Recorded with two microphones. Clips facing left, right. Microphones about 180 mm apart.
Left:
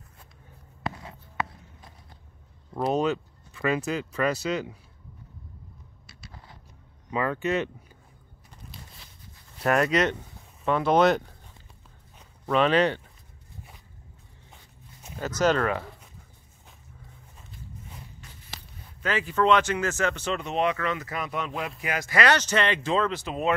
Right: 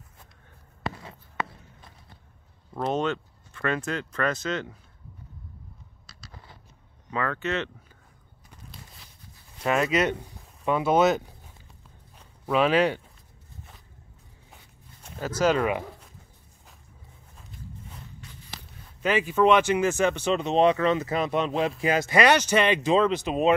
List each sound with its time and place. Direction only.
2.7 s speech: 5° left (ahead or behind)
7.1 s speech: 15° left (ahead or behind)
9.6 s speech: centre (ahead or behind)
15.0 s a sound: 5° left (ahead or behind)
15.2 s speech: 5° right (ahead or behind)
19.0 s speech: 15° right (ahead or behind)